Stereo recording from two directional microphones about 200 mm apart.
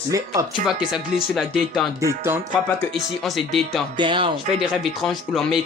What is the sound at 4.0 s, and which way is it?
Speech, 25° right (ahead or behind).